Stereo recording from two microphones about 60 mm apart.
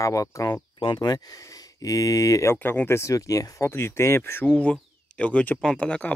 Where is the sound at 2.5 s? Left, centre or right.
Left.